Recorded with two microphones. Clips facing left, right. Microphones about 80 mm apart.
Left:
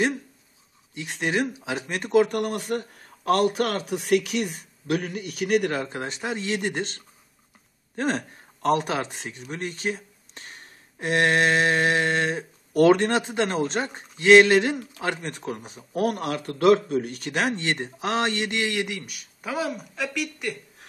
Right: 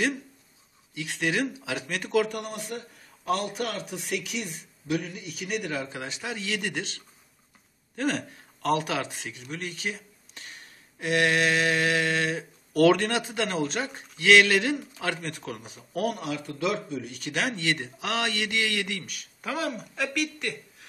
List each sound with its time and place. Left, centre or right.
0.9 s a man's voice: left
2.2 s a man's voice: left
16.2 s speech: left
17.3 s a man's voice: left; by 20.4 s centre